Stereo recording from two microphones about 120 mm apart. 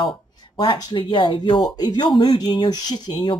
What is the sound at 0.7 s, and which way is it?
Speech, 35° left (ahead or behind).